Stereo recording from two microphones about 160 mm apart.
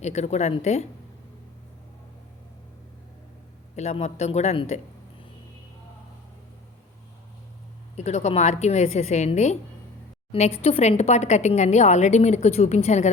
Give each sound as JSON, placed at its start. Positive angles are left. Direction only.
{"t": 0.0, "sound": "speech", "side_deg": 45}
{"t": 3.8, "sound": "speech", "side_deg": 45}
{"t": 7.9, "sound": "speech", "side_deg": 45}